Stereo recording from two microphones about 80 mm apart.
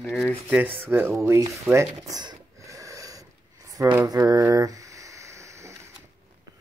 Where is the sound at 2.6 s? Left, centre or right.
Right.